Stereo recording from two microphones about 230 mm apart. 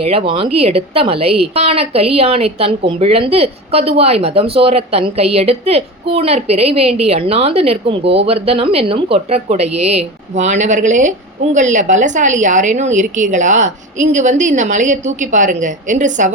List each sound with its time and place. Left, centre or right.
0.0 s a woman's voice: right